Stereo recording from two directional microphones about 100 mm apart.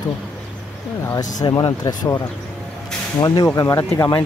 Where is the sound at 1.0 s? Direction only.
35° left (ahead or behind).